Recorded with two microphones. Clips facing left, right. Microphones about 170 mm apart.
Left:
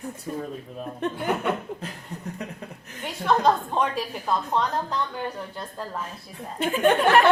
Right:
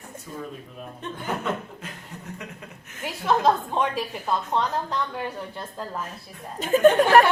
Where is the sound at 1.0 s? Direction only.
65° left (ahead or behind).